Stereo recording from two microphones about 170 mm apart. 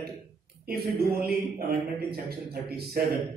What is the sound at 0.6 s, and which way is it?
A man's voice, 65° right (ahead or behind).